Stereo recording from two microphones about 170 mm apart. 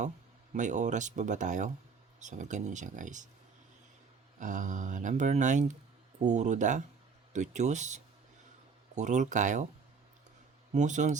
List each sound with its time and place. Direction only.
0.5 s speech: 45° right (ahead or behind)
4.4 s speech: 50° right (ahead or behind)
10.8 s speech: 45° right (ahead or behind)